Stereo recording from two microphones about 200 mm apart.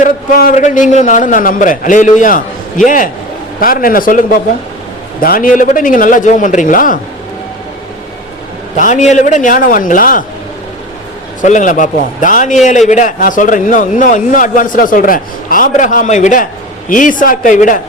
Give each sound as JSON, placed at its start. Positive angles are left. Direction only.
{"t": 0.0, "sound": "a man's voice", "side_deg": 45}
{"t": 8.7, "sound": "a man's voice", "side_deg": 35}
{"t": 11.4, "sound": "a man's voice", "side_deg": 40}